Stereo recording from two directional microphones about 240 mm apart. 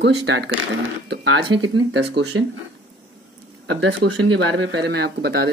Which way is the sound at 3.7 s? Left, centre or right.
Right.